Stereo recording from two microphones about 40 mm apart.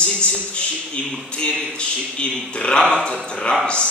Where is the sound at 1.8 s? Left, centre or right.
Left.